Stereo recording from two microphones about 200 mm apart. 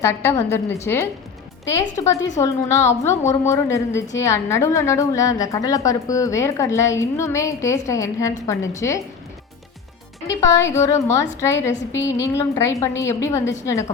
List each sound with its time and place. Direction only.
0.0 s a woman's voice: 15° left (ahead or behind)
10.2 s a woman's voice: 15° left (ahead or behind)